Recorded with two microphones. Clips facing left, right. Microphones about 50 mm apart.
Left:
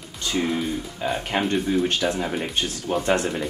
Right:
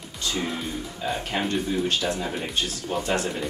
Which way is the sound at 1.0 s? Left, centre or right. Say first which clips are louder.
Left 3 dB; centre.